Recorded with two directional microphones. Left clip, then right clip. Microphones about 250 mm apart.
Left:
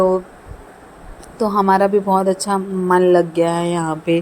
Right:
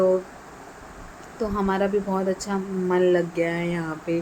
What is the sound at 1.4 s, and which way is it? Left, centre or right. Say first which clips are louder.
Speech: left 10 dB; left.